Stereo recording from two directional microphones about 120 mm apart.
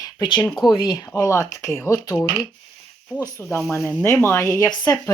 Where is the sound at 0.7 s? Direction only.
30° left (ahead or behind).